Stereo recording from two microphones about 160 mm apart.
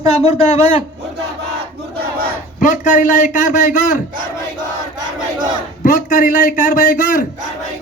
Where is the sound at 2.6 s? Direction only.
55° left (ahead or behind).